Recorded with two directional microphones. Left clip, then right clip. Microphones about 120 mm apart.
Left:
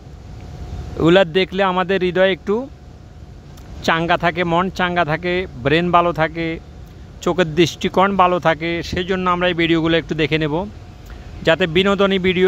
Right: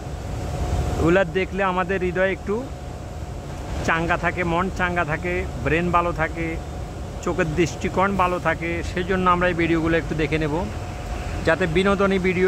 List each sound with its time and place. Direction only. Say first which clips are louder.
1.0 s speech: left 6 dB; 75° left (ahead or behind)
4.1 s speech: left 5 dB; 80° left
4.5 s speech: left 5 dB; 60° left (ahead or behind); by 6.6 s 80° left
7.2 s speech: left 6 dB; 70° left (ahead or behind)
8.2 s speech: left 6 dB; 85° left
8.8 s speech: right 1 dB; 45° left (ahead or behind)